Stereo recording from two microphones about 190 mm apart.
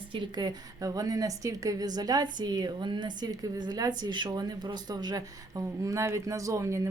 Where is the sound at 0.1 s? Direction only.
25° right (ahead or behind).